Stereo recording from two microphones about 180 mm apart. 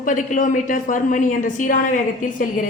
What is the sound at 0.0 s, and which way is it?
A woman's voice, 45° left (ahead or behind).